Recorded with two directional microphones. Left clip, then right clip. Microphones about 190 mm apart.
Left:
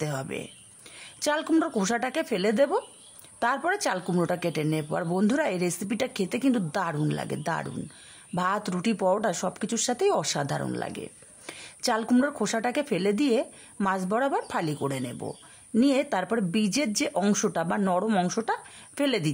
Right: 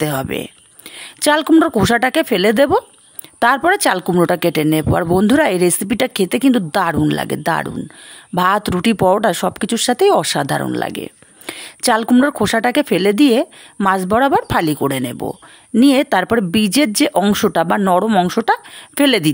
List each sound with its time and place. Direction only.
0.0 s speech: 45° right (ahead or behind)